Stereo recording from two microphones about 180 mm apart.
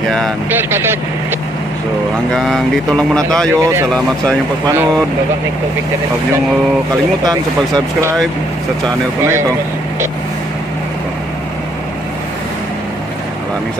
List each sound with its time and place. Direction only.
0.5 s speech: 10° right (ahead or behind)
2.3 s speech: centre (ahead or behind)
3.5 s speech: 15° right (ahead or behind)
3.9 s speech: 5° left (ahead or behind)